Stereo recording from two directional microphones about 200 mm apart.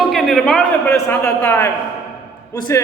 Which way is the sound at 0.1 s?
Centre (ahead or behind).